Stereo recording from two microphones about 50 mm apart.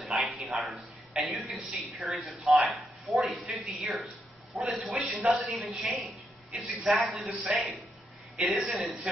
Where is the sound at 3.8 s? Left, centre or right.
Centre.